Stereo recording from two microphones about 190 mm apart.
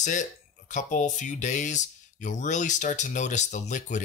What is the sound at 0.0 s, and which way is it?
Speech, 40° left (ahead or behind).